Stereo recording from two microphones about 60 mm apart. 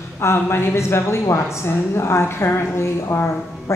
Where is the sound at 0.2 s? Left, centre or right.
Left.